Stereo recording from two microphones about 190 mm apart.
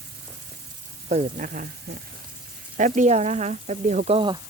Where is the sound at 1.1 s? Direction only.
45° right (ahead or behind).